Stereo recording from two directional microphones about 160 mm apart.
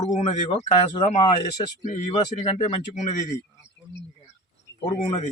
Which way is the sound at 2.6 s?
45° left (ahead or behind).